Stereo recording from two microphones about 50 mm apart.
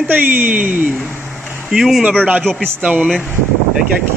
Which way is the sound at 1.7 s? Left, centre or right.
Centre.